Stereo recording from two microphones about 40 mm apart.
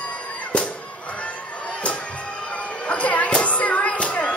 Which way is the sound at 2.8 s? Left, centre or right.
Left.